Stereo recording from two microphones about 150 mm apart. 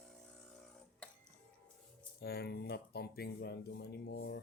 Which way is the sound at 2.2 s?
90° left.